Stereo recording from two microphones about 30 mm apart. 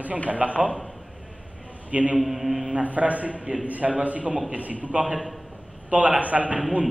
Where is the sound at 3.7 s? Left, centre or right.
Right.